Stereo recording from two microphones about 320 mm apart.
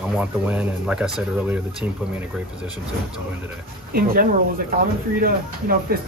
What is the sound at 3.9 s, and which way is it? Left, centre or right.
Speech, right.